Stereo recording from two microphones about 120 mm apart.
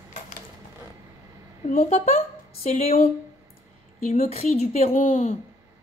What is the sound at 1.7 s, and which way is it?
A woman's voice, 75° left (ahead or behind).